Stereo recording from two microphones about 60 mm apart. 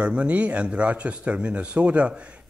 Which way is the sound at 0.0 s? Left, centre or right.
Right.